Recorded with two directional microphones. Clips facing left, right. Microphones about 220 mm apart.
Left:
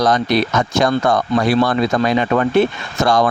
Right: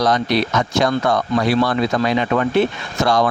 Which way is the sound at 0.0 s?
50° left (ahead or behind).